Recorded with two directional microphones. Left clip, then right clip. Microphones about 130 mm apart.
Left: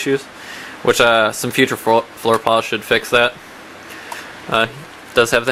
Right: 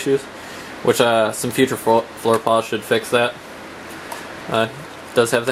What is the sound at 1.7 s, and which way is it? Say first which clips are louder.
Speech: left 2 dB; 25° left (ahead or behind).